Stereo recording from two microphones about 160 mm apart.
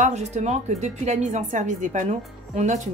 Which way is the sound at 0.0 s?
45° right (ahead or behind).